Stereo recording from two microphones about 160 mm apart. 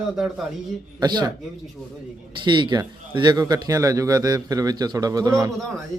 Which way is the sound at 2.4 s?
30° right (ahead or behind).